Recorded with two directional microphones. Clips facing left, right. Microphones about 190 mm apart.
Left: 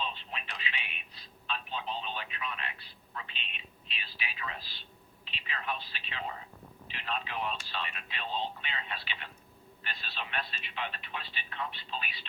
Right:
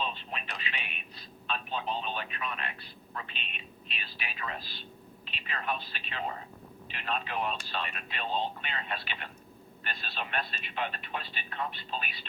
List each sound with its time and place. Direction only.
0.0 s telephone: 50° right (ahead or behind)
6.8 s speech: 50° right (ahead or behind)